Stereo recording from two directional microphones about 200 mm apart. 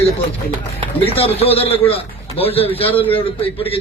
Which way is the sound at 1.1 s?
30° left (ahead or behind).